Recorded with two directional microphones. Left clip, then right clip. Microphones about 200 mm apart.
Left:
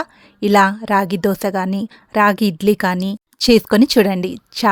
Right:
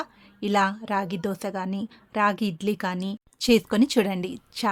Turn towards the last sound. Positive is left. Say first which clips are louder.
# left 10 dB
turn(degrees=40)  # may be behind; listen again after turning